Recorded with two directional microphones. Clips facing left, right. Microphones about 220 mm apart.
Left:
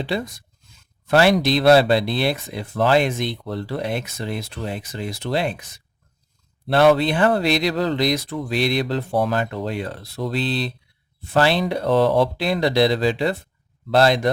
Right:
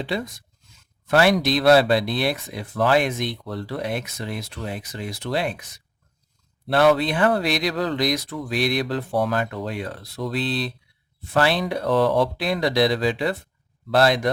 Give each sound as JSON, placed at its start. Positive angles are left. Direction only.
{"t": 1.0, "sound": "speech", "side_deg": 25}